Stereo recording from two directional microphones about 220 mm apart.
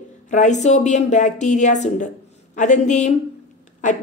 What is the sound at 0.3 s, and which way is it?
A woman's voice, 35° left (ahead or behind).